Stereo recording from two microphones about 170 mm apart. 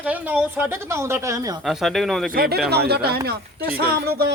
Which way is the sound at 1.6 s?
Centre (ahead or behind).